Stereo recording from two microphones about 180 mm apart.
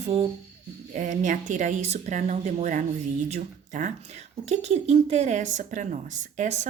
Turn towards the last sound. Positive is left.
turn(degrees=-40)  # may be behind; listen again after turning